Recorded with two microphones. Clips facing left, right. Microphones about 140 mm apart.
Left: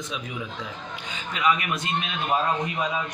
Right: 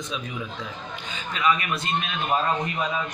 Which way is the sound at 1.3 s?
15° left (ahead or behind).